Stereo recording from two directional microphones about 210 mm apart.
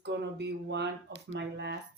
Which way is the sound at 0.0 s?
55° right (ahead or behind).